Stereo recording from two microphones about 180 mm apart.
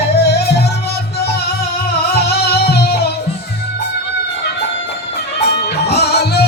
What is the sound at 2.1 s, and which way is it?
Music, 60° left (ahead or behind).